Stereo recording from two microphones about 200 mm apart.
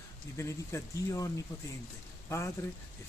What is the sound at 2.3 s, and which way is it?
Speech, 15° left (ahead or behind).